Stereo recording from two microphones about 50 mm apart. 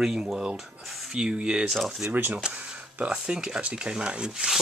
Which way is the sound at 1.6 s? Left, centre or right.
Centre.